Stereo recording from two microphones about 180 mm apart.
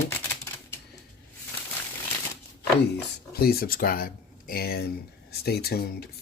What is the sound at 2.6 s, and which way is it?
Speech, 65° left (ahead or behind).